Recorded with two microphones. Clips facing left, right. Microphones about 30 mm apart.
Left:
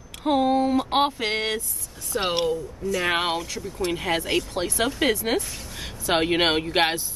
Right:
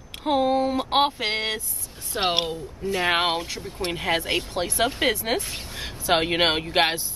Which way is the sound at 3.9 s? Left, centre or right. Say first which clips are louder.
Even; centre.